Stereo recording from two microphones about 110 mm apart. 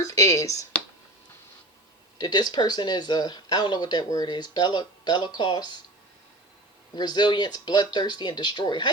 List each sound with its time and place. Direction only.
0.0 s speech: 30° left (ahead or behind)
2.1 s speech: 40° left (ahead or behind)
6.9 s speech: 40° left (ahead or behind)